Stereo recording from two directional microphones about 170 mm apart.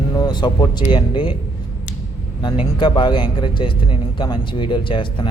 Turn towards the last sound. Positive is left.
turn(degrees=30)  # may be behind; listen again after turning